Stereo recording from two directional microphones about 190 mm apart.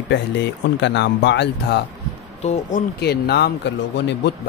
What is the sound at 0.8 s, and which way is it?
Speech, 65° left (ahead or behind).